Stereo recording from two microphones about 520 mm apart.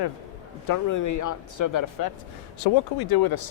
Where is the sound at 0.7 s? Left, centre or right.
Left.